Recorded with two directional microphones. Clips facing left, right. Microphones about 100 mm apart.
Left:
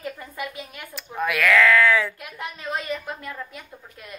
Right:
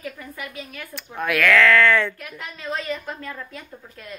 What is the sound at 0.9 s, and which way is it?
Speech, centre (ahead or behind).